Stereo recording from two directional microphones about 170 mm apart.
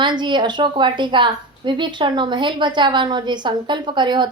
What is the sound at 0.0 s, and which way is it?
A woman's voice, 25° right (ahead or behind).